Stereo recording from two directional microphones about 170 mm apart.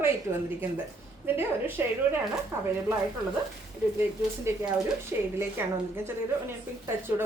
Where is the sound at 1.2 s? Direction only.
15° right (ahead or behind).